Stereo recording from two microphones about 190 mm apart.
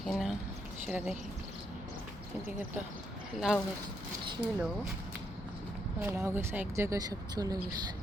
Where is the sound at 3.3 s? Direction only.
Centre (ahead or behind).